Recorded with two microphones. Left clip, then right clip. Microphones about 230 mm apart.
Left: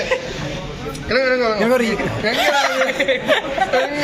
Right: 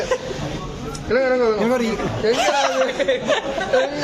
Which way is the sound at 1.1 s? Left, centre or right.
Centre.